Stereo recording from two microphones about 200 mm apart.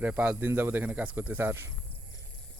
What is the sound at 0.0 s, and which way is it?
Speech, 10° right (ahead or behind).